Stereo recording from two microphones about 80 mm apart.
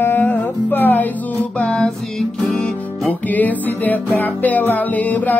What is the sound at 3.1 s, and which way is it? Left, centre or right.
Music, left.